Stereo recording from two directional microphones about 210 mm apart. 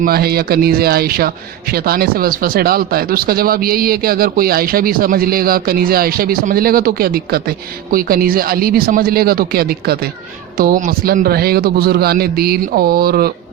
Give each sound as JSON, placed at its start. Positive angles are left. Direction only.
{"t": 0.0, "sound": "speech", "side_deg": -45}